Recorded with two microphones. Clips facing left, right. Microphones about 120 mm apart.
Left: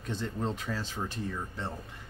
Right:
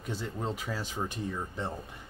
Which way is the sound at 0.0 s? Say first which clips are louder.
Left 1 dB; 5° right (ahead or behind).